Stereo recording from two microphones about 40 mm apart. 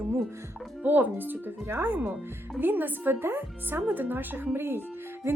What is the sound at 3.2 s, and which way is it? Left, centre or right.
Speech, right.